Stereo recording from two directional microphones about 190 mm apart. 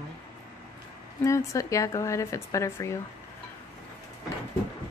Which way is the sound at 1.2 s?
15° left (ahead or behind).